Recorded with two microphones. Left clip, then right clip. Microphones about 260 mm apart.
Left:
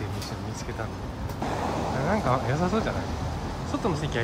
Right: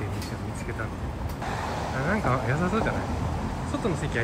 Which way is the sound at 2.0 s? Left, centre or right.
Centre.